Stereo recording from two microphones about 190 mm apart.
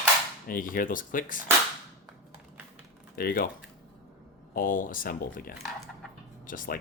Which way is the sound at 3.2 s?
50° left (ahead or behind).